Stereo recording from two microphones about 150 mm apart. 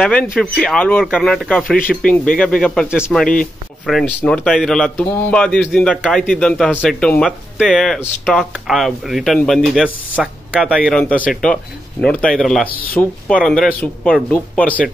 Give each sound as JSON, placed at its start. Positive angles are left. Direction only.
{"t": 0.0, "sound": "speech", "side_deg": 5}
{"t": 10.8, "sound": "speech", "side_deg": 5}
{"t": 12.6, "sound": "speech", "side_deg": 75}
{"t": 12.9, "sound": "speech", "side_deg": 5}